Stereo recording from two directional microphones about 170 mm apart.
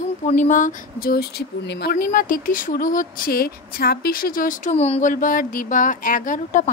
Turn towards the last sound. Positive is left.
turn(degrees=50)  # may be behind; listen again after turning